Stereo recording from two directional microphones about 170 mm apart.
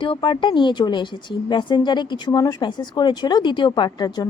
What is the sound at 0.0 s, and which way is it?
Speech, 30° left (ahead or behind).